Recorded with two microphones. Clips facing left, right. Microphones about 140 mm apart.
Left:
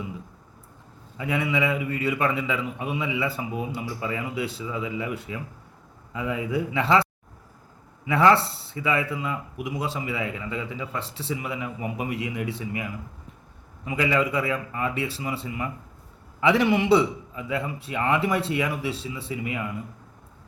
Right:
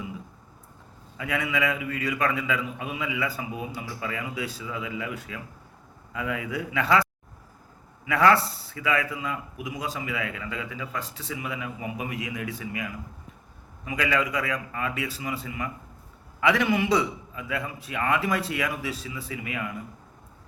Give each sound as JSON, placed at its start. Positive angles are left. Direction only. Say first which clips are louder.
{"t": 1.2, "sound": "a man's voice", "louder": "left 2 dB", "side_deg": 25}